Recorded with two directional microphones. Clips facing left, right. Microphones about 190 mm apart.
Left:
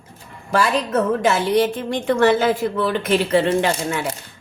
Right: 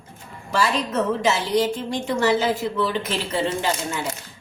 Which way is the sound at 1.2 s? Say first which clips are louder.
Left 3 dB; 55° left (ahead or behind).